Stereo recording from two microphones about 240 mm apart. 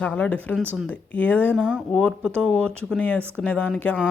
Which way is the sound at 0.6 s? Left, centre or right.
Centre.